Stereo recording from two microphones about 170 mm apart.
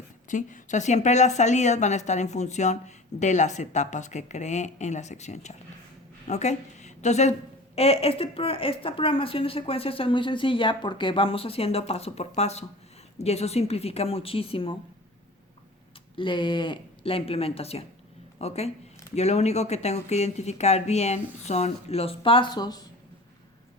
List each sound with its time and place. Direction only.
0.3 s a woman's voice: 50° left (ahead or behind); by 14.8 s 30° left (ahead or behind)
16.1 s a woman's voice: 30° left (ahead or behind)